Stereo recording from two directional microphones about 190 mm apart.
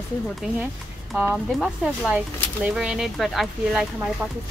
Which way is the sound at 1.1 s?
5° right (ahead or behind).